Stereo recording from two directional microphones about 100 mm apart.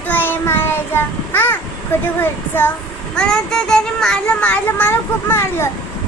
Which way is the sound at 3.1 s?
5° left (ahead or behind).